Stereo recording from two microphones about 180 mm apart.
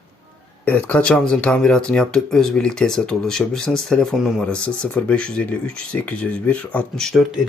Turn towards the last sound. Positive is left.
turn(degrees=0)  # may be behind; listen again after turning